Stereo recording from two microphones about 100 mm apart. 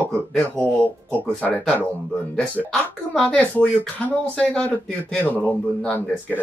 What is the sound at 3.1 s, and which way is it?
Speech, 10° left (ahead or behind).